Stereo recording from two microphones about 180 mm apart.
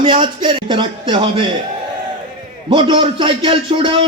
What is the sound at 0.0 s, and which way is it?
A man's voice, 25° right (ahead or behind).